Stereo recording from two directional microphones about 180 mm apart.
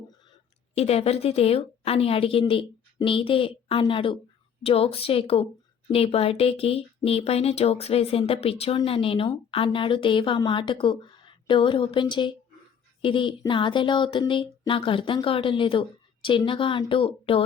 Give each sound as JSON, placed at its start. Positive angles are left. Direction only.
{"t": 0.8, "sound": "speech", "side_deg": 35}